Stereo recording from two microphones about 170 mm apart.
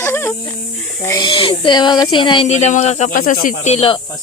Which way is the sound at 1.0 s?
25° left (ahead or behind).